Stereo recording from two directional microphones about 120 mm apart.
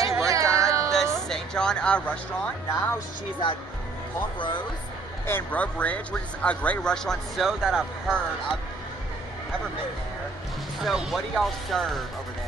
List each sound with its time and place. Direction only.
0.0 s music: 25° right (ahead or behind)
1.1 s speech: 5° left (ahead or behind)
4.4 s speech: 40° left (ahead or behind)
5.2 s speech: 15° left (ahead or behind); by 8.2 s 5° right (ahead or behind)
10.8 s speech: centre (ahead or behind)